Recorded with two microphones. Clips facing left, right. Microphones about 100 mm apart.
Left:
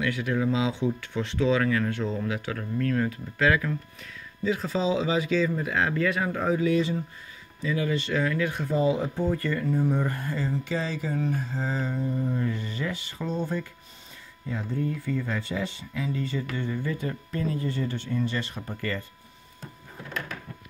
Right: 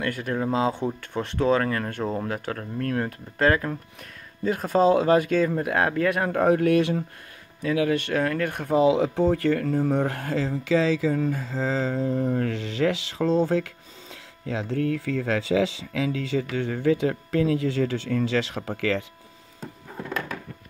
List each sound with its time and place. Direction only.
0.0 s speech: 50° right (ahead or behind); by 19.0 s 90° right